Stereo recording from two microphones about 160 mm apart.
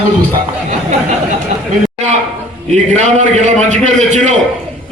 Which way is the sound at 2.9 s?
45° right (ahead or behind).